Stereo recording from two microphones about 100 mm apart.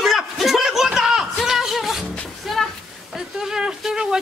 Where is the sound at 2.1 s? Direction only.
5° left (ahead or behind).